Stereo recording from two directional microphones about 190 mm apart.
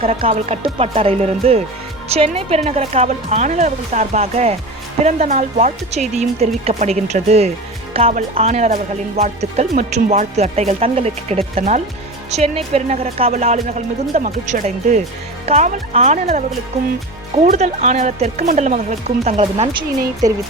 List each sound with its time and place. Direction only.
0.0 s speech: 30° right (ahead or behind)